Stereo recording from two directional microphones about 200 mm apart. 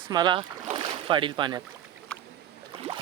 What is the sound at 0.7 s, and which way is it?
Boat, 25° right (ahead or behind).